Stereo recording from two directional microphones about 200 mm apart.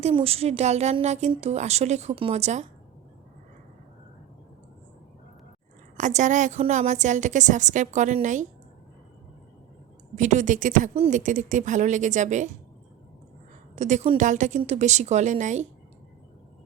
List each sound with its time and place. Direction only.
0.0 s a woman's voice: 30° right (ahead or behind)
6.0 s a woman's voice: 35° right (ahead or behind)
10.2 s a woman's voice: 35° right (ahead or behind)
13.7 s a woman's voice: 35° right (ahead or behind)